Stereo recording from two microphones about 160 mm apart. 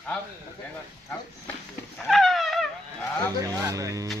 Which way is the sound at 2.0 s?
Centre (ahead or behind).